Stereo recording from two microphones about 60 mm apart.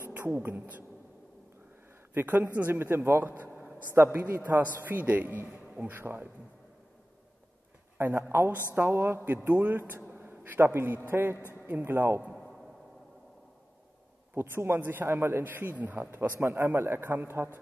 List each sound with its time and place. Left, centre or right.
0.0 s a woman's voice: right
2.1 s a man's voice: right
8.0 s a man's voice: right
11.3 s a man's voice: left
11.8 s a man's voice: right
12.3 s a sound: centre
14.3 s a man's voice: right